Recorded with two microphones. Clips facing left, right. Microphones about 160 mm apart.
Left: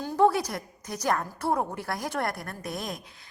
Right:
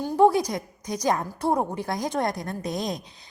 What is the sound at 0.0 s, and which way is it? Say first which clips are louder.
A woman's voice: right 4 dB; 15° right (ahead or behind).